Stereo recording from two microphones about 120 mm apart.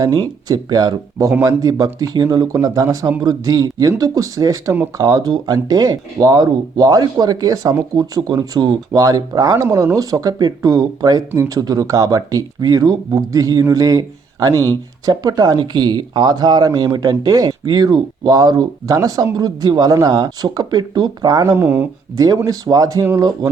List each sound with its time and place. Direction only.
0.0 s speech: 30° right (ahead or behind)
21.5 s speech: 20° right (ahead or behind)
22.4 s speech: 30° right (ahead or behind)